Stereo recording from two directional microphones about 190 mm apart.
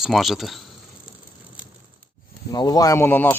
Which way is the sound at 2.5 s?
20° left (ahead or behind).